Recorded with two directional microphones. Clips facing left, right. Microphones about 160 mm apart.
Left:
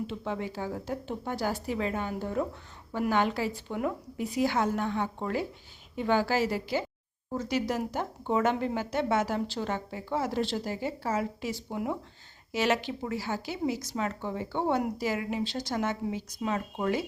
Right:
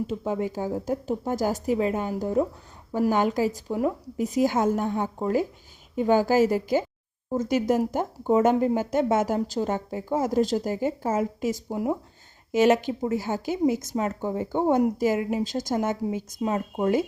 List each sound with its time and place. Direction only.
0.1 s a woman's voice: 40° right (ahead or behind)
1.8 s a woman's voice: 10° right (ahead or behind)
2.9 s a woman's voice: 40° right (ahead or behind)
3.7 s a woman's voice: 5° right (ahead or behind)
4.2 s a woman's voice: 45° right (ahead or behind)